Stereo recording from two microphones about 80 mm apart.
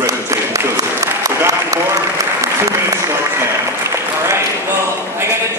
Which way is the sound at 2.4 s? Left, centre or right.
Right.